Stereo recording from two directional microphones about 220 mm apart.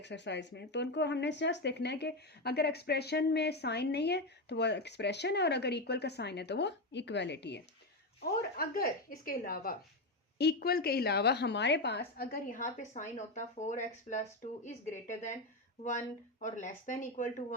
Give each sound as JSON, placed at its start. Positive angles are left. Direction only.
{"t": 0.0, "sound": "a woman's voice", "side_deg": 50}